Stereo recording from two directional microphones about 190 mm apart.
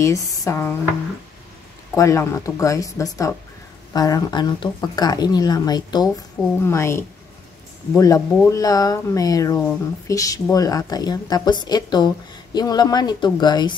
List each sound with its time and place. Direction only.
0.0 s speech: 15° left (ahead or behind)
2.0 s speech: 15° left (ahead or behind)